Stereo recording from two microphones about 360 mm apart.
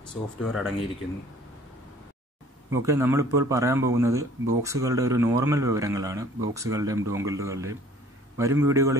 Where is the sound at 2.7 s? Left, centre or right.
Centre.